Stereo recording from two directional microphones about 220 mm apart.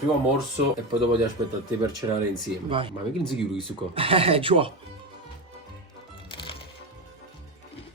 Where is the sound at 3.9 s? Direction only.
25° right (ahead or behind).